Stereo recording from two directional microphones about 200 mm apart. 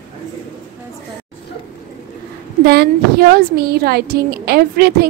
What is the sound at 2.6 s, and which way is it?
A woman's voice, 50° right (ahead or behind).